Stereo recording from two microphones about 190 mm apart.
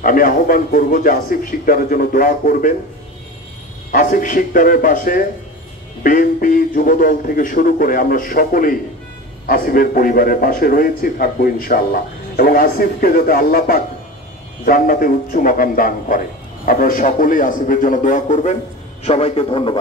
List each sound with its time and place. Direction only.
0.0 s a man's voice: 45° left (ahead or behind)
3.9 s a man's voice: 45° left (ahead or behind); by 19.8 s 25° left (ahead or behind)